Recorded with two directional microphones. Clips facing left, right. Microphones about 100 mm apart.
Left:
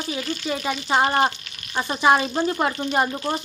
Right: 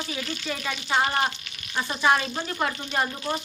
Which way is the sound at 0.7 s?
35° left (ahead or behind).